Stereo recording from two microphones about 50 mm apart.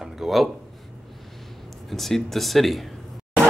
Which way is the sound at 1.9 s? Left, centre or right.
Centre.